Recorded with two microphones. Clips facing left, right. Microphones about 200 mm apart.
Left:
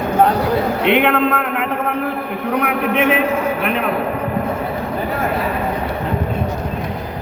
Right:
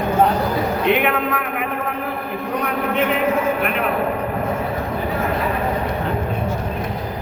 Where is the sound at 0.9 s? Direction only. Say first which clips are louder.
Left 5 dB; 75° left (ahead or behind).